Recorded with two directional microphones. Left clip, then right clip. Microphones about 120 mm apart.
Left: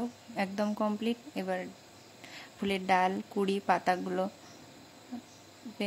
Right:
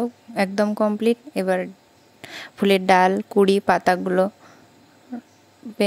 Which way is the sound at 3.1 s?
90° right.